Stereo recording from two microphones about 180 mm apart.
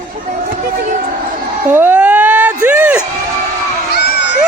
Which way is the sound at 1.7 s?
10° right (ahead or behind).